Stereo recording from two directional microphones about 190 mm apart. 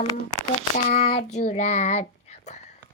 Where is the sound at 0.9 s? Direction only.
35° left (ahead or behind).